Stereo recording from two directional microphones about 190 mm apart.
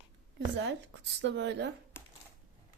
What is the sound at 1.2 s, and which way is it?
Speech, 70° right (ahead or behind).